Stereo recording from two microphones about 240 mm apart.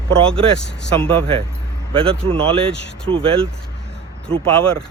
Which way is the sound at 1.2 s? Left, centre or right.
Right.